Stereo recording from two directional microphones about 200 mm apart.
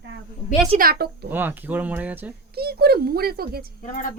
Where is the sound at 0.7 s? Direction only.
50° right (ahead or behind).